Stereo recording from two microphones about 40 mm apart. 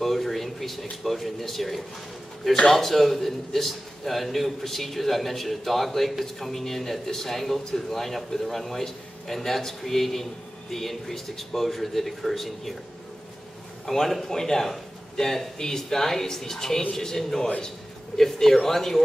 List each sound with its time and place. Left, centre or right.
0.0 s a man's voice: centre
13.8 s a man's voice: centre